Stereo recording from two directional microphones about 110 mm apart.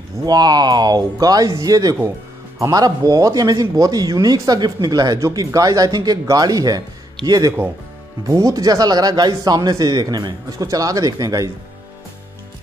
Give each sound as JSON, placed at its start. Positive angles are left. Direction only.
{"t": 0.2, "sound": "speech", "side_deg": -35}